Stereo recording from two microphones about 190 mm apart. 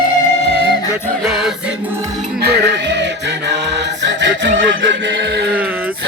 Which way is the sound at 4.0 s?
75° right (ahead or behind).